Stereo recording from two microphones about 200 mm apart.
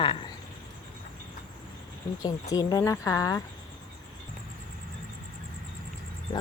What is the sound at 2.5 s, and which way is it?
Speech, 20° left (ahead or behind).